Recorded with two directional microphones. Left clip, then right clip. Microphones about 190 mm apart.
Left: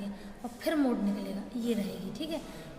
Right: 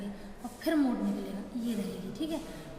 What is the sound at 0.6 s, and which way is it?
A woman's voice, 40° left (ahead or behind).